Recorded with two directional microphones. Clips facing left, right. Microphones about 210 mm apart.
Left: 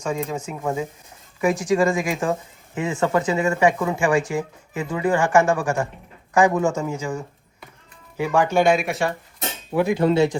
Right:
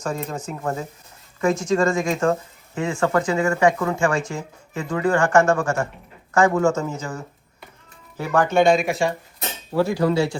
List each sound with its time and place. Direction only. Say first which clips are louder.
0.2 s speech: left 2 dB; 5° left (ahead or behind)
8.2 s speech: right 1 dB; 10° left (ahead or behind)
9.7 s speech: left 1 dB; 20° left (ahead or behind)